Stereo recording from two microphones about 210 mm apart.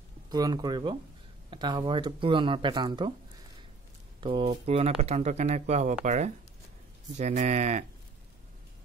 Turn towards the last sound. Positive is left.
turn(degrees=-35)  # may be behind; listen again after turning